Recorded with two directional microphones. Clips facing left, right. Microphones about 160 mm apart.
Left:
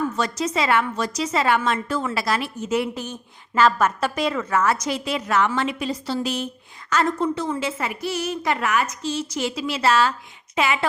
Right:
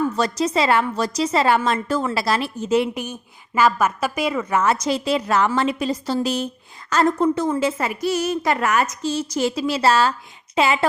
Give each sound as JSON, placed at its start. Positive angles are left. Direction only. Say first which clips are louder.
{"t": 0.2, "sound": "a woman's voice", "louder": "right 3 dB", "side_deg": -35}
{"t": 2.9, "sound": "a woman's voice", "louder": "right 2 dB", "side_deg": -10}